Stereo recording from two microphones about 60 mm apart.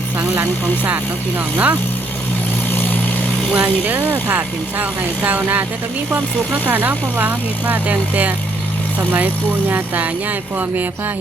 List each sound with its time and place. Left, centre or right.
1.5 s speech: right
2.7 s vehicle: left
3.8 s speech: right